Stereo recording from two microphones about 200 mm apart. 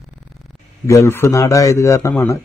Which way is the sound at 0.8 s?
15° left (ahead or behind).